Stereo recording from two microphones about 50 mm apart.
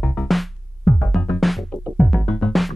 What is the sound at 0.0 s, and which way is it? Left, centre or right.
Music, centre.